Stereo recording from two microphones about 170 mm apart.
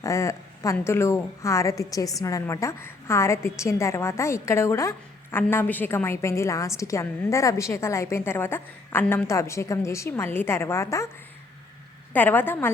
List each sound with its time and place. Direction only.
0.0 s a woman's voice: 20° left (ahead or behind)
12.1 s a woman's voice: 10° left (ahead or behind)